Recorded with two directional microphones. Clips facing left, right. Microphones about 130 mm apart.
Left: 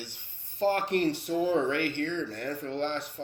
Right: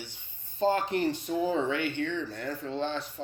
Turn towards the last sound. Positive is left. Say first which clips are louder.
# even
turn(degrees=65)  # may be behind; listen again after turning